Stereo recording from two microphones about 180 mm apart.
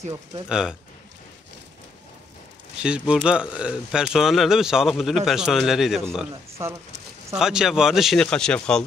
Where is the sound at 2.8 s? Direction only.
5° right (ahead or behind).